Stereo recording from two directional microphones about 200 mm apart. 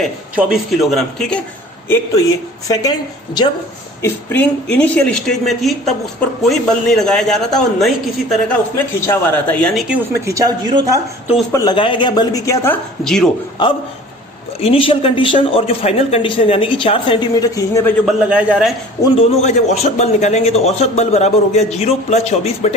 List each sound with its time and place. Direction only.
0.0 s speech: 5° right (ahead or behind)
2.6 s speech: 20° left (ahead or behind)
4.0 s speech: 10° left (ahead or behind)
9.0 s speech: 10° left (ahead or behind)
10.2 s speech: 15° right (ahead or behind)
11.5 s speech: 20° left (ahead or behind); by 13.3 s centre (ahead or behind)
14.6 s speech: 25° left (ahead or behind)
18.0 s speech: 5° right (ahead or behind)
19.2 s a man's voice: 35° left (ahead or behind)